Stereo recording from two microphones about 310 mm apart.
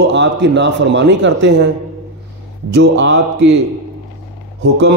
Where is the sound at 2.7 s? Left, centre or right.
Right.